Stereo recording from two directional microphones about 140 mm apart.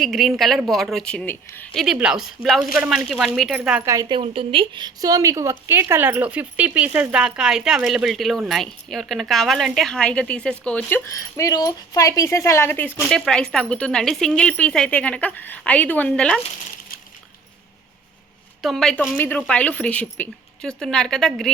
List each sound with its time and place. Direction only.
0.0 s a woman's voice: centre (ahead or behind)
1.7 s a woman's voice: centre (ahead or behind)
4.1 s a woman's voice: 40° right (ahead or behind); by 11.0 s 10° left (ahead or behind)
11.2 s speech: 25° left (ahead or behind)
13.0 s speech: 5° left (ahead or behind)
18.6 s speech: 5° left (ahead or behind)